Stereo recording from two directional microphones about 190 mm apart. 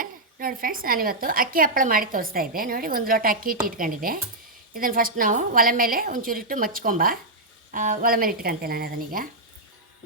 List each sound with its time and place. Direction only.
0.0 s a woman's voice: 50° right (ahead or behind)